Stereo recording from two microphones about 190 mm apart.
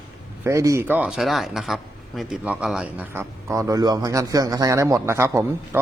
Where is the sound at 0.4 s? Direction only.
15° right (ahead or behind).